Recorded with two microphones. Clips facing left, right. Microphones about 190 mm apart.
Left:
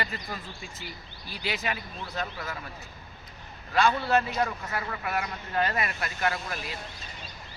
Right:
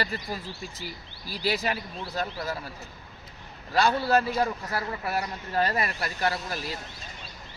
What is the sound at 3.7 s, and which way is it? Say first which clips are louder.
Speech: right 1 dB; 35° right (ahead or behind).